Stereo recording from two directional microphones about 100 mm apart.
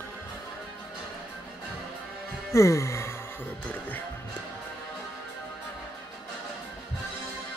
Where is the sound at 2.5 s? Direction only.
30° left (ahead or behind).